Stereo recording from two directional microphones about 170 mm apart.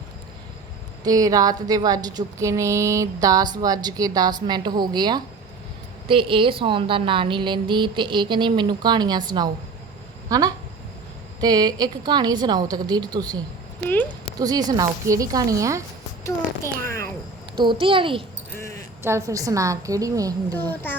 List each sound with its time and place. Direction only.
1.0 s speech: 20° right (ahead or behind)
13.8 s a child's voice: 10° left (ahead or behind)
14.3 s speech: 20° right (ahead or behind)
16.8 s a sound: 15° left (ahead or behind)
17.6 s a child's voice: 30° right (ahead or behind)
18.5 s a sound: 20° left (ahead or behind)
19.0 s speech: 15° right (ahead or behind)
20.5 s a child's voice: 10° left (ahead or behind)